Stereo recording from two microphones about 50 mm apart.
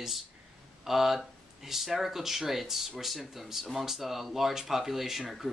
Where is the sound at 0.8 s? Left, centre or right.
Centre.